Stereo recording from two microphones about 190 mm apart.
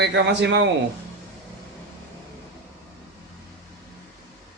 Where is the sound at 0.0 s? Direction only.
65° right (ahead or behind).